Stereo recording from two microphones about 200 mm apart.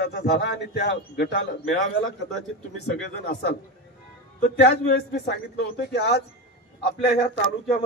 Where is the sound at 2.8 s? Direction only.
50° left (ahead or behind).